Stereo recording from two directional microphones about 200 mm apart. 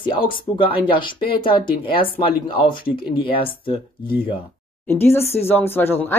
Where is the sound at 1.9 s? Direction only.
25° left (ahead or behind).